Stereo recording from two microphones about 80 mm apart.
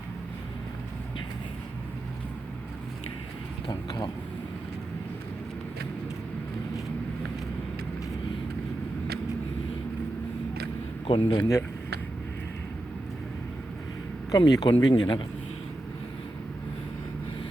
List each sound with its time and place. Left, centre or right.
3.7 s speech: left
11.1 s speech: left
14.3 s speech: left